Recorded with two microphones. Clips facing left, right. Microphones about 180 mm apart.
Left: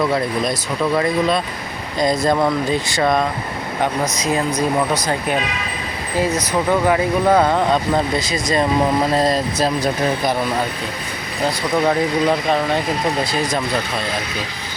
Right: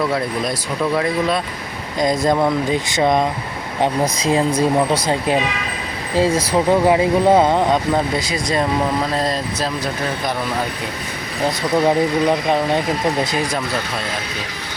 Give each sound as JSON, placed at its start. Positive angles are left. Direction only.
{"t": 2.0, "sound": "speech", "side_deg": -15}
{"t": 11.9, "sound": "speech", "side_deg": -15}